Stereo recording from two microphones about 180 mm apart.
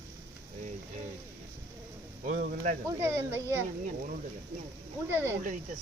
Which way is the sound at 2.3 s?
45° right (ahead or behind).